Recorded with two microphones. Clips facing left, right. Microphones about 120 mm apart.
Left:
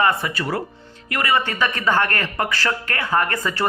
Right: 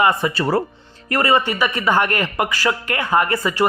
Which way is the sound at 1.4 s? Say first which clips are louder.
Right 2 dB; 10° right (ahead or behind).